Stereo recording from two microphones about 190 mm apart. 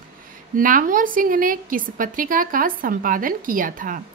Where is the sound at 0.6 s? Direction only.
45° right (ahead or behind).